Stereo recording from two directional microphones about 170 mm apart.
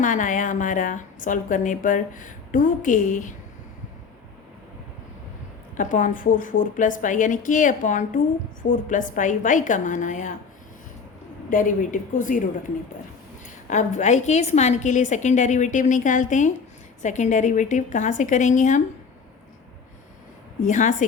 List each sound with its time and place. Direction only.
0.0 s a woman's voice: 50° left (ahead or behind)
5.7 s a woman's voice: 50° left (ahead or behind)
11.4 s a woman's voice: 50° left (ahead or behind)
13.7 s a woman's voice: 45° left (ahead or behind)
20.7 s a woman's voice: 45° left (ahead or behind)